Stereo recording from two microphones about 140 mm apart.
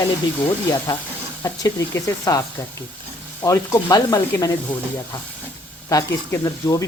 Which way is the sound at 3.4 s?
20° left (ahead or behind).